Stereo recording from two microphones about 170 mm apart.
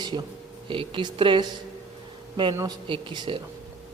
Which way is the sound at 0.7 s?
30° right (ahead or behind).